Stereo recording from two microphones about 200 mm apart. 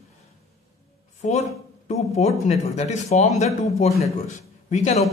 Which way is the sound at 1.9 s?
35° left (ahead or behind).